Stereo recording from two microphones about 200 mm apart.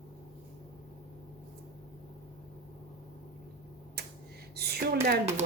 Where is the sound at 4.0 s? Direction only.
55° right (ahead or behind).